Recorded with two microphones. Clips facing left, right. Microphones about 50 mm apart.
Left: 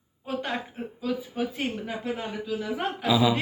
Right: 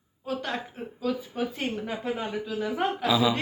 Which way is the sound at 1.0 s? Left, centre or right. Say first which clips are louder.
Even; centre.